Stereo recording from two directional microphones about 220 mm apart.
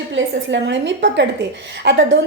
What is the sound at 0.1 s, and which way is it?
A woman's voice, 55° right (ahead or behind).